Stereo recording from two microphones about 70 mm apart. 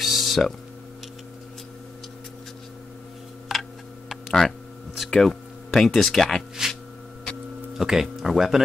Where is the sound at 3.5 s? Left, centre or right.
Centre.